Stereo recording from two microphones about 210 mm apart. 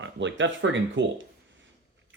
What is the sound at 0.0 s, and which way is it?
Speech, 60° right (ahead or behind).